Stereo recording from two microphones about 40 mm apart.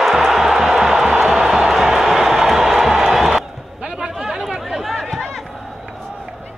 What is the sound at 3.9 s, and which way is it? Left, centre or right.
Chatter, centre.